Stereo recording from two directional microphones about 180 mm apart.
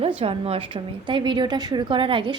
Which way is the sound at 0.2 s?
30° right (ahead or behind).